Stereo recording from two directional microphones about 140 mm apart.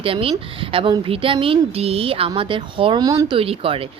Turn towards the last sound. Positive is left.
turn(degrees=-40)  # may be behind; listen again after turning